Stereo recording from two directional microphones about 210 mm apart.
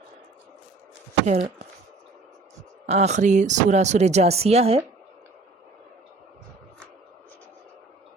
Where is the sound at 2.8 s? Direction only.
30° right (ahead or behind).